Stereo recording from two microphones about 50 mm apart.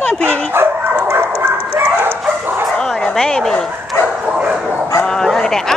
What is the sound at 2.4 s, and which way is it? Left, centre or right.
Bow-wow, right.